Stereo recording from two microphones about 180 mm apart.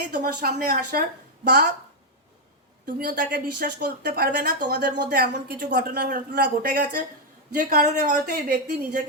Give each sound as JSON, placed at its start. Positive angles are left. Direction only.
{"t": 0.0, "sound": "speech", "side_deg": -65}
{"t": 0.7, "sound": "a woman's voice", "side_deg": -50}
{"t": 2.8, "sound": "speech", "side_deg": -55}
{"t": 4.9, "sound": "speech", "side_deg": -65}
{"t": 8.7, "sound": "a woman's voice", "side_deg": -45}